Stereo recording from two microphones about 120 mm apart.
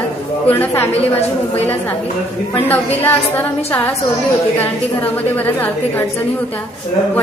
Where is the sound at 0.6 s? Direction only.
20° left (ahead or behind).